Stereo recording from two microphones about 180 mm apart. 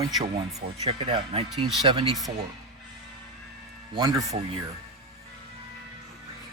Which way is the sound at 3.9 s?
20° right (ahead or behind).